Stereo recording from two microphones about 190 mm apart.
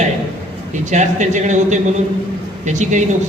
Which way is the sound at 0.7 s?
40° right (ahead or behind).